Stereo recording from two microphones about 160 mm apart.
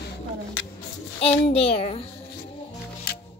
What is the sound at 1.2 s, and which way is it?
Speech, 40° left (ahead or behind).